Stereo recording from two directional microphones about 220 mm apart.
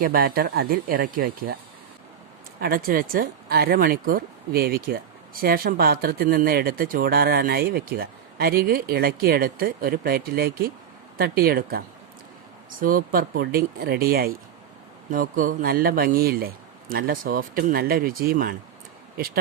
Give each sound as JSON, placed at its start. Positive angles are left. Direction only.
{"t": 0.0, "sound": "speech", "side_deg": -45}
{"t": 2.6, "sound": "speech", "side_deg": -40}
{"t": 12.8, "sound": "speech", "side_deg": -40}